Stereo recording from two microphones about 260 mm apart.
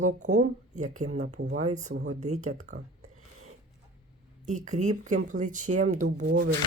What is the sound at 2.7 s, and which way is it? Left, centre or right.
Speech, right.